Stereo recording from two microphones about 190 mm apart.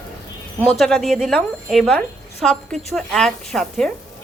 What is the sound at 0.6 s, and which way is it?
A woman's voice, centre (ahead or behind).